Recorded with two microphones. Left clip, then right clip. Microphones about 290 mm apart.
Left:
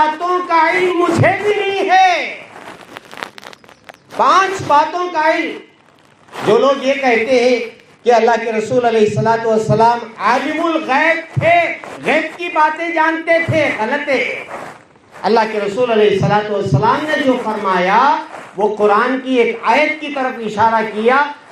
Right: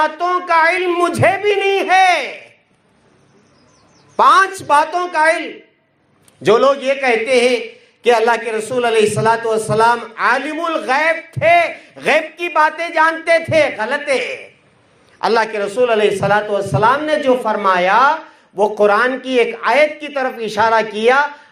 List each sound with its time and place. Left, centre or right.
0.2 s child singing: right
1.2 s a sound: right
4.2 s a man's voice: right
6.5 s a man's voice: right
15.2 s a man's voice: right